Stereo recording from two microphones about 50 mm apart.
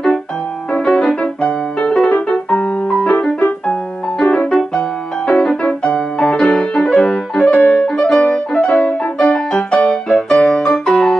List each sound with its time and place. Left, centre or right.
0.7 s music: centre
2.0 s piano: left
4.2 s music: left
6.1 s piano: centre
7.8 s brass instrument: centre
8.6 s music: left